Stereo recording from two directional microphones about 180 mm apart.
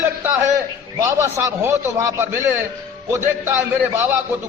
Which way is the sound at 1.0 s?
15° right (ahead or behind).